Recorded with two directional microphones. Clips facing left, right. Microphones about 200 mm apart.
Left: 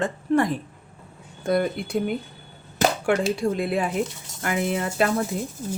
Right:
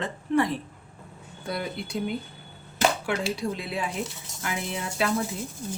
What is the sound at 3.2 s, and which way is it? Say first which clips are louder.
Speech: left 6 dB; 50° left (ahead or behind).